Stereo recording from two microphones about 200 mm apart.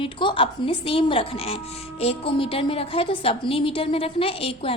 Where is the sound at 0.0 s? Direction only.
25° left (ahead or behind).